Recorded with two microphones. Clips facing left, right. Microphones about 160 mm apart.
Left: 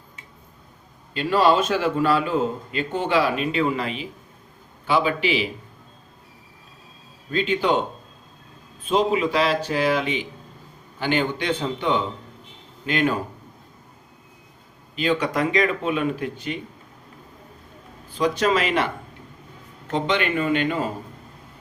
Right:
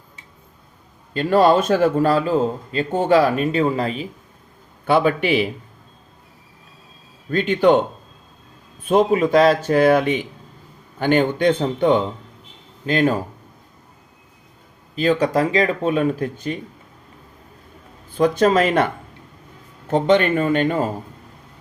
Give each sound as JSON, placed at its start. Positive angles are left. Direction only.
{"t": 1.1, "sound": "a man's voice", "side_deg": -45}
{"t": 4.9, "sound": "a man's voice", "side_deg": -55}
{"t": 7.3, "sound": "a man's voice", "side_deg": -55}
{"t": 8.9, "sound": "a man's voice", "side_deg": -50}
{"t": 14.9, "sound": "speech", "side_deg": -40}
{"t": 18.1, "sound": "a man's voice", "side_deg": -50}
{"t": 19.9, "sound": "a man's voice", "side_deg": -45}